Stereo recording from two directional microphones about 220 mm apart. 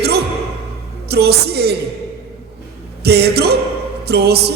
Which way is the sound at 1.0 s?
45° right (ahead or behind).